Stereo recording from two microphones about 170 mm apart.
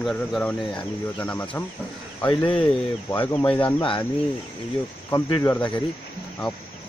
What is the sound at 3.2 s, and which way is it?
Speech, 15° left (ahead or behind).